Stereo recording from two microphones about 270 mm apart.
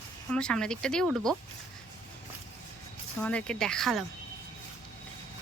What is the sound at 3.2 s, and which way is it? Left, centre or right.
Speech, centre.